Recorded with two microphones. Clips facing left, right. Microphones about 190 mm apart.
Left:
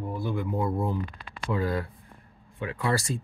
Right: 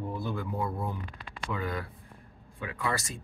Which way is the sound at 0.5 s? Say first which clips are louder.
Left 6 dB; 25° left (ahead or behind).